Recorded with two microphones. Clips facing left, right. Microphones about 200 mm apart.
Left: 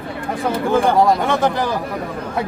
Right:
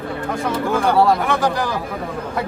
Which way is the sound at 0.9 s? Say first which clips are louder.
Left 1 dB; 20° left (ahead or behind).